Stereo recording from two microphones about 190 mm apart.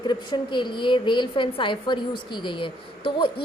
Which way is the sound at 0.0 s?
25° left (ahead or behind).